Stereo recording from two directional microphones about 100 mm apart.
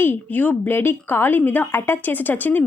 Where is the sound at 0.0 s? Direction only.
20° left (ahead or behind).